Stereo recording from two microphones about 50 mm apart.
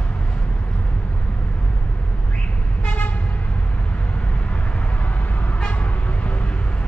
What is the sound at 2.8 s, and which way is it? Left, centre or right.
Vehicle, left.